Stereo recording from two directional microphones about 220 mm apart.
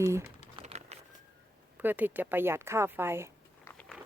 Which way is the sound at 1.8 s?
10° right (ahead or behind).